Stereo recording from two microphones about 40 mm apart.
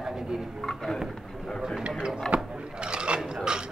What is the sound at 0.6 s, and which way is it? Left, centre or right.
Speech, centre.